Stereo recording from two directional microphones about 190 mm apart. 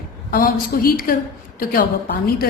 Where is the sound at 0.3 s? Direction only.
50° left (ahead or behind).